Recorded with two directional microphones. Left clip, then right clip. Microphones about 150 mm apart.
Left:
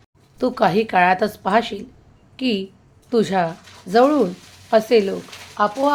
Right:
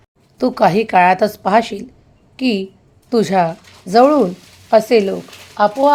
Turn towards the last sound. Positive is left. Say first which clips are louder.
# right 5 dB
turn(degrees=-35)  # may be behind; listen again after turning